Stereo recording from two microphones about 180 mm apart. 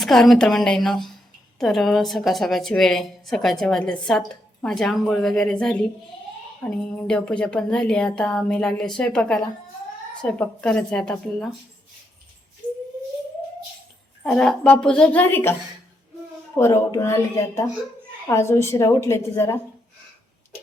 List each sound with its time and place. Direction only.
0.0 s a woman's voice: centre (ahead or behind)
14.3 s a woman's voice: 5° left (ahead or behind)
16.6 s a woman's voice: 15° left (ahead or behind)